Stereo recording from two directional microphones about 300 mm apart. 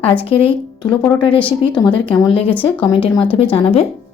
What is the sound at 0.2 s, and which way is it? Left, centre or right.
Speech, centre.